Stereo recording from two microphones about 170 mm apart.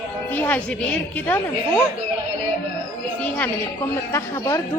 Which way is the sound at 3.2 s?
10° left (ahead or behind).